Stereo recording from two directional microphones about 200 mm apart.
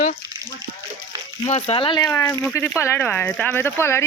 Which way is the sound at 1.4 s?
30° left (ahead or behind).